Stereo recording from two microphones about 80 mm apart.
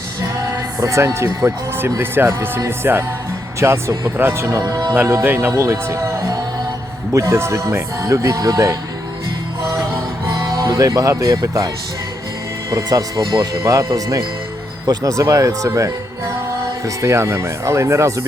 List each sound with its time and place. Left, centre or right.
0.8 s speech: right
5.2 s speech: right
10.2 s music: right
11.4 s speech: right
12.7 s speech: right